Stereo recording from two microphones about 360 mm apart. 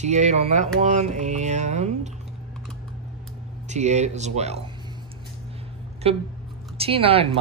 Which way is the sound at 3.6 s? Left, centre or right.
Centre.